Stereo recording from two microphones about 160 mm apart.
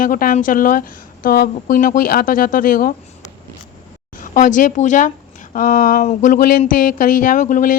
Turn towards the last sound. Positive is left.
turn(degrees=55)  # may be behind; listen again after turning